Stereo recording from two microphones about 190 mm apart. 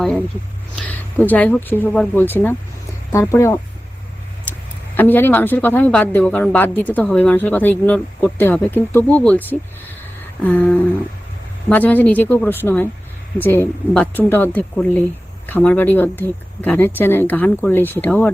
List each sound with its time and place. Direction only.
0.8 s a woman's voice: 10° left (ahead or behind)
4.9 s a woman's voice: 10° left (ahead or behind)